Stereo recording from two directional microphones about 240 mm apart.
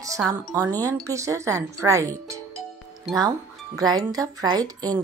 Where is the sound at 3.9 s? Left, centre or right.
Centre.